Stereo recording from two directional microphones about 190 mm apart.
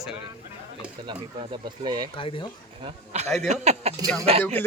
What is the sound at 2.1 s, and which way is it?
Speech, 25° left (ahead or behind).